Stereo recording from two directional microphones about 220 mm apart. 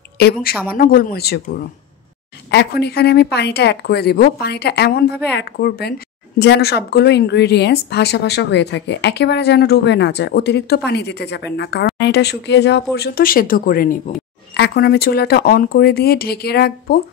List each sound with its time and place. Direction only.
0.2 s speech: 45° left (ahead or behind)